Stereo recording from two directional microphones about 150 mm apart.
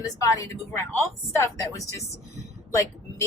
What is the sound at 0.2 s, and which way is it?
Speech, 20° left (ahead or behind).